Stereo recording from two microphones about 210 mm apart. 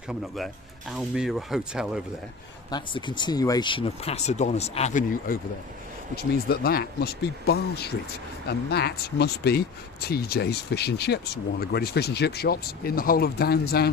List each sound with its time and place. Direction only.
0.1 s speech: centre (ahead or behind)
2.6 s speech: 20° left (ahead or behind); by 13.9 s 50° left (ahead or behind)